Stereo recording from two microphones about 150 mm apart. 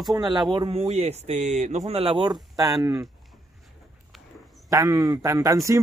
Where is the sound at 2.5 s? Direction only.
25° right (ahead or behind).